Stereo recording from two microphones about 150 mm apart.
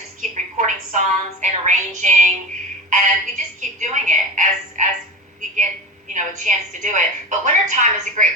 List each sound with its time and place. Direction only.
0.2 s a woman's voice: 55° right (ahead or behind)
6.1 s a woman's voice: 55° right (ahead or behind)